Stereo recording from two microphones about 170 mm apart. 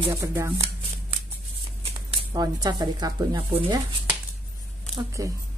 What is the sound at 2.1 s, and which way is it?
Speech, 25° right (ahead or behind).